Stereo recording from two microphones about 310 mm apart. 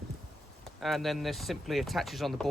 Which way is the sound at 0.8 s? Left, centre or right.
Centre.